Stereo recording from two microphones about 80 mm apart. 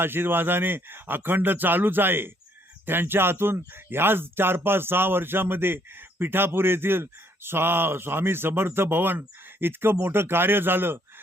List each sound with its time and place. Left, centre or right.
0.0 s speech: right